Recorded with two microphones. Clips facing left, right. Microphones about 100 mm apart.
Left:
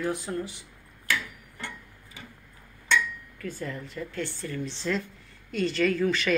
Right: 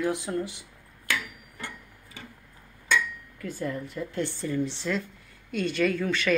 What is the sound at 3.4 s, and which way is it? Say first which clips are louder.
Speech: right 3 dB; 15° right (ahead or behind).